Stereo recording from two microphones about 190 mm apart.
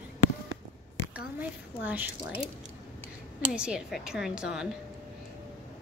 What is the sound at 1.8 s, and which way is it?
Speech, 10° right (ahead or behind).